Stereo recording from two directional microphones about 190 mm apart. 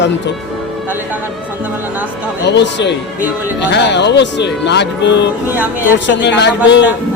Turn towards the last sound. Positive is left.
turn(degrees=70)  # may be behind; listen again after turning